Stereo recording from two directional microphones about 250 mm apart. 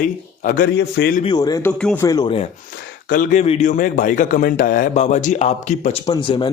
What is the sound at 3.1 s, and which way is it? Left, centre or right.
A man's voice, left.